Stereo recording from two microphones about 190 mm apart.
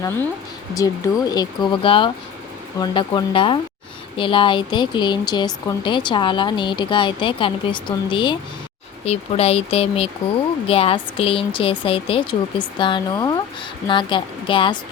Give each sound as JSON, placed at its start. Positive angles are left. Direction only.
{"t": 0.7, "sound": "speech", "side_deg": 20}